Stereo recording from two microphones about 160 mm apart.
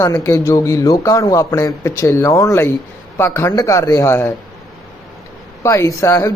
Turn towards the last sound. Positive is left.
turn(degrees=20)  # may be behind; listen again after turning